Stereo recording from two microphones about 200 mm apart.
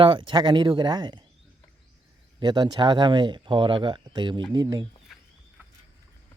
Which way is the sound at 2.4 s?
20° right (ahead or behind).